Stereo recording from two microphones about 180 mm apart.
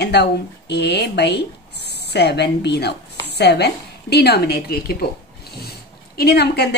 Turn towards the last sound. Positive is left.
turn(degrees=65)  # may be behind; listen again after turning